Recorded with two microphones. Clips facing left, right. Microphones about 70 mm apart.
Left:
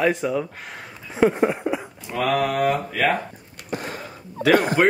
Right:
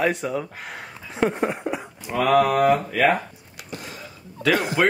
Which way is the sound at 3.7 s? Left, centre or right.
Left.